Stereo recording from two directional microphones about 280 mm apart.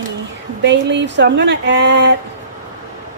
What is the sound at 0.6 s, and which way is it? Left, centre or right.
A woman's voice, right.